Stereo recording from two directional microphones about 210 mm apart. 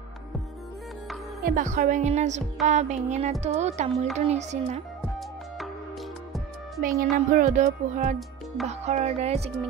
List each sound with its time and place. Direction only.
1.4 s a woman's voice: 40° right (ahead or behind)
6.8 s a woman's voice: 40° right (ahead or behind)